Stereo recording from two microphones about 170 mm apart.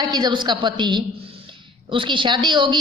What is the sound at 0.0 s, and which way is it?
A woman's voice, 25° right (ahead or behind).